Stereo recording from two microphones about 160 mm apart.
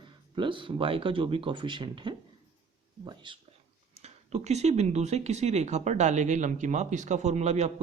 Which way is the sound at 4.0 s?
40° right (ahead or behind).